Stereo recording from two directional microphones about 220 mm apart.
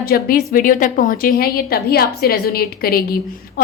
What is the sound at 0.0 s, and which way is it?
A woman's voice, 40° left (ahead or behind).